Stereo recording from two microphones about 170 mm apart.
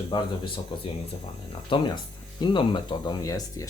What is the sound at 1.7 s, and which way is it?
Speech, 30° left (ahead or behind).